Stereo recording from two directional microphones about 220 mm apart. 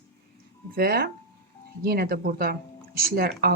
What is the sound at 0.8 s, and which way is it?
Speech, 45° right (ahead or behind).